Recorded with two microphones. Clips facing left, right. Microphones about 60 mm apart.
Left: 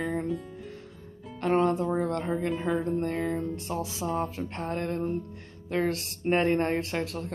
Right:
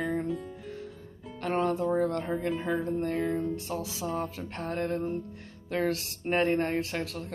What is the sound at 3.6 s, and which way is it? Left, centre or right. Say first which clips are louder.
Speech: left 2 dB; left.